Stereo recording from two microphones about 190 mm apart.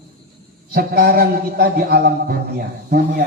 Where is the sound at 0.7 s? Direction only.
50° right (ahead or behind).